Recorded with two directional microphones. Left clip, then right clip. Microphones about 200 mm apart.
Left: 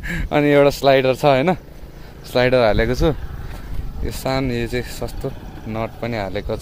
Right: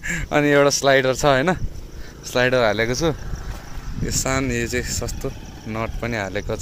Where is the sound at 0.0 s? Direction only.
5° left (ahead or behind).